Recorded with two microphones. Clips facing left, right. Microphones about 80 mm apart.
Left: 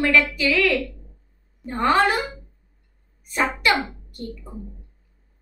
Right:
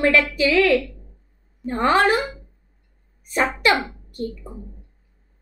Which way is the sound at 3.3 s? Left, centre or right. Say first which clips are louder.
Right 2 dB; right.